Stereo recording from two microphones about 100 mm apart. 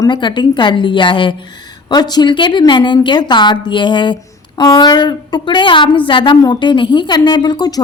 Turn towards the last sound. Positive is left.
turn(degrees=45)  # may be behind; listen again after turning